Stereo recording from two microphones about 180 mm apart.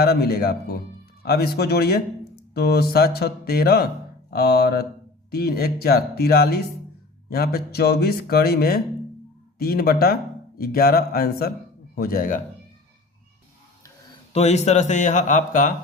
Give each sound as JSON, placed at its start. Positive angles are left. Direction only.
{"t": 0.0, "sound": "speech", "side_deg": 60}
{"t": 14.3, "sound": "speech", "side_deg": 40}